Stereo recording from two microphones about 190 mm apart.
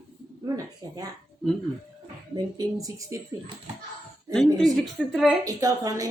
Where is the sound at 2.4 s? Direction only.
20° right (ahead or behind).